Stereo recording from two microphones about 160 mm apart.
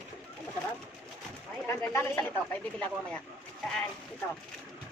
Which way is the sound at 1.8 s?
15° left (ahead or behind).